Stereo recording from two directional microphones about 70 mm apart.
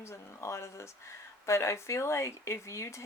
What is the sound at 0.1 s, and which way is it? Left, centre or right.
Speech, left.